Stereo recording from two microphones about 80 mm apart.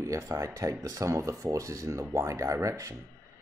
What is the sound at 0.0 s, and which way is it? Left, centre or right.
Speech, right.